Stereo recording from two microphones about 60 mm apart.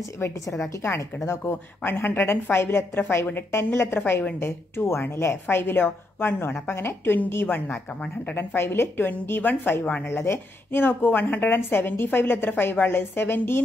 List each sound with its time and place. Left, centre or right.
0.2 s a woman's voice: left
10.0 s a woman's voice: left